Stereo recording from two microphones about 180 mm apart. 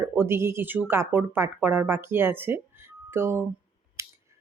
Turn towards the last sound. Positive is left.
turn(degrees=-15)  # may be behind; listen again after turning